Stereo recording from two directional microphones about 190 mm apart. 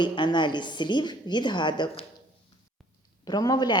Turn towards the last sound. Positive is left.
turn(degrees=20)  # may be behind; listen again after turning